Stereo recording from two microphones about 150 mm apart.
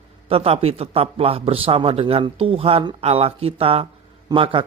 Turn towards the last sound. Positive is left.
turn(degrees=-35)  # may be behind; listen again after turning